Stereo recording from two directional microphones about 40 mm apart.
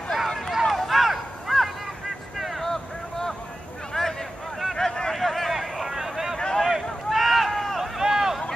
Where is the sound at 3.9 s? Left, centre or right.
Centre.